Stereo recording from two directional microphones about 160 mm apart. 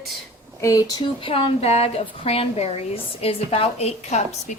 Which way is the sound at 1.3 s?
40° left (ahead or behind).